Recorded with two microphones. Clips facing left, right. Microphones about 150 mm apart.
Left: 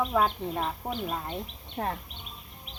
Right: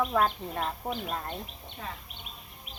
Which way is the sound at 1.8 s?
55° left (ahead or behind).